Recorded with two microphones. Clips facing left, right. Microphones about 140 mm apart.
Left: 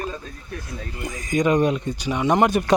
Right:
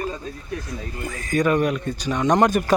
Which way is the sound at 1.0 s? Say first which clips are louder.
Even; 15° left (ahead or behind).